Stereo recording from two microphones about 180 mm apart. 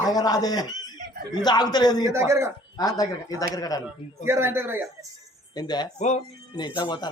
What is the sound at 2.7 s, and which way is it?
Speech, 20° left (ahead or behind).